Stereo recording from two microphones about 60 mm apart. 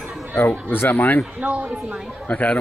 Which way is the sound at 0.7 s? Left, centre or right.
Left.